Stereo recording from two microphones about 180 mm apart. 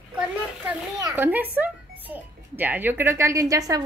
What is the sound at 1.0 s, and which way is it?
Speech, 20° right (ahead or behind).